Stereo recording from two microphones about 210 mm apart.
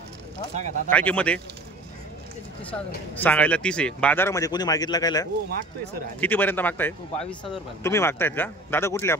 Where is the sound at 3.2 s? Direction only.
5° left (ahead or behind).